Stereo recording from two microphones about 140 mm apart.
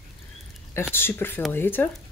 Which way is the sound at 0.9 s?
15° left (ahead or behind).